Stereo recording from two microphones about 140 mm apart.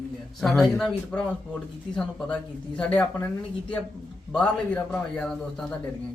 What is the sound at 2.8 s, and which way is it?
Speech, 10° left (ahead or behind).